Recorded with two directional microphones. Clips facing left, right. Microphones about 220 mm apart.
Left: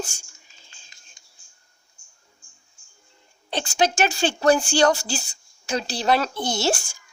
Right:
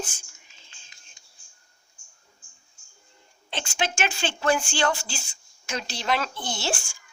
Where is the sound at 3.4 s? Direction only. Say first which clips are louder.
Left 7 dB; 40° left (ahead or behind).